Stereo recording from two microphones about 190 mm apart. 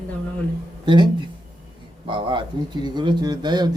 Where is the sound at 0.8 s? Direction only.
25° right (ahead or behind).